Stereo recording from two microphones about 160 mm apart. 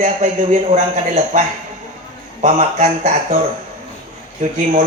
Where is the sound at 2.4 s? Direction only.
45° right (ahead or behind).